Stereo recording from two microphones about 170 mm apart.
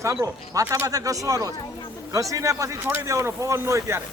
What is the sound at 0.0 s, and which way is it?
Speech, 20° right (ahead or behind).